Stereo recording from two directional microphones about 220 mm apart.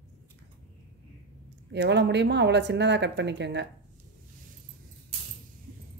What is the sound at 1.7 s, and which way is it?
Speech, 50° right (ahead or behind).